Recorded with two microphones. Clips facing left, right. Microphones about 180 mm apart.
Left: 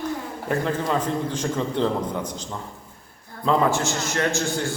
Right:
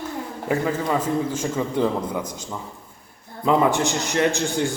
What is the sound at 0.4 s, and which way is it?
A man's voice, 10° right (ahead or behind).